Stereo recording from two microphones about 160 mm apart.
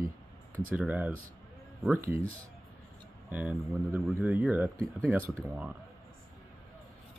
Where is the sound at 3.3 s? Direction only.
10° right (ahead or behind).